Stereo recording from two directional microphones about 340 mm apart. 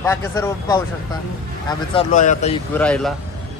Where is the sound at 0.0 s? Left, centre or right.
Centre.